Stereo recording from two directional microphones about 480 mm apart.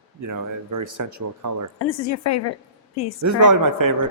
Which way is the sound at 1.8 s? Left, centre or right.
Left.